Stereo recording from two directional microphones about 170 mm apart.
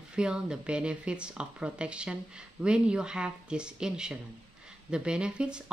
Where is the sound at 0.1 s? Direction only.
5° right (ahead or behind).